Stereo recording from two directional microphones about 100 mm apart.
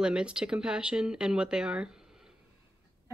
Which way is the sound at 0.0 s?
10° right (ahead or behind).